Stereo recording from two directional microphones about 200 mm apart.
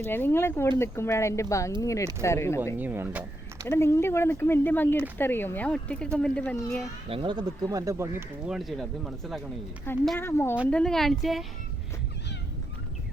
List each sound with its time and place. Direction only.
0.0 s speech: 10° left (ahead or behind)
2.7 s speech: 10° right (ahead or behind)
3.7 s speech: 15° left (ahead or behind)
7.1 s speech: 25° right (ahead or behind)
8.4 s speech: centre (ahead or behind)
10.2 s speech: 10° left (ahead or behind)